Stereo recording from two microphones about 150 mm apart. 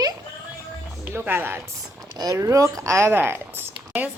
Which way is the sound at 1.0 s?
15° right (ahead or behind).